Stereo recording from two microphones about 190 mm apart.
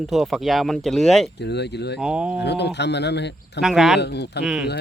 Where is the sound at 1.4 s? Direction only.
60° left (ahead or behind).